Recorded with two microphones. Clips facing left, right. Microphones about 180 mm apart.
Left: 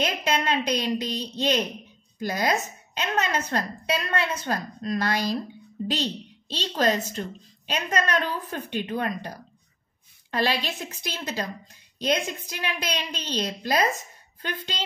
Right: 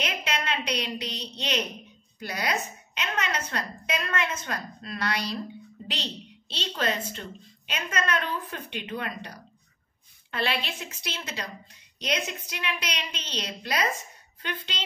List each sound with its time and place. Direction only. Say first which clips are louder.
0.0 s a woman's voice: left 6 dB; 40° left (ahead or behind)
6.5 s a woman's voice: left 5 dB; 40° left (ahead or behind)
10.3 s a woman's voice: left 4 dB; 40° left (ahead or behind)